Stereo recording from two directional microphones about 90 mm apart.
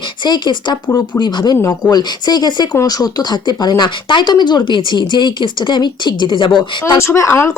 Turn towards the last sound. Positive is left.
turn(degrees=30)  # may be behind; listen again after turning